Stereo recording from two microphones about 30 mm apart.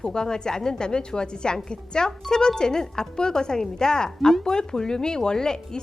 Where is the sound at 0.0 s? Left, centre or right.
Left.